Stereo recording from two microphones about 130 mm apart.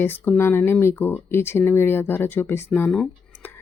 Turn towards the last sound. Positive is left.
turn(degrees=15)  # may be behind; listen again after turning